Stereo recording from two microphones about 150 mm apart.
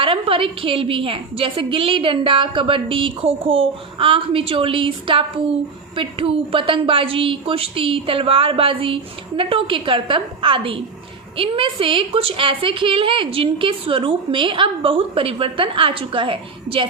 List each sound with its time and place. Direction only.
0.0 s a woman's voice: 35° right (ahead or behind)